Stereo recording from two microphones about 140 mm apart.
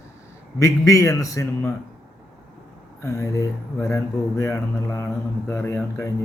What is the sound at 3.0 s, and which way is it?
Speech, 20° left (ahead or behind).